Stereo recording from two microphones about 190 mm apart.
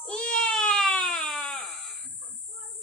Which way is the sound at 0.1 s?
5° left (ahead or behind).